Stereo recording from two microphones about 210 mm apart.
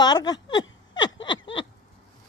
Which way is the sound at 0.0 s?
20° left (ahead or behind).